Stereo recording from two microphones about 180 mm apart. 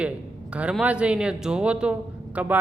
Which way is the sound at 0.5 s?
5° right (ahead or behind).